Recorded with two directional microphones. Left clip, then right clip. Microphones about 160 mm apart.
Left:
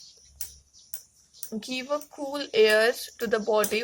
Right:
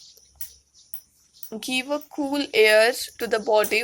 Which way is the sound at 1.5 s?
25° right (ahead or behind).